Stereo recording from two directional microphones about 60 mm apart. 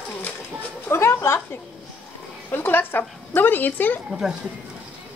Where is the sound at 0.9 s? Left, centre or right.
Left.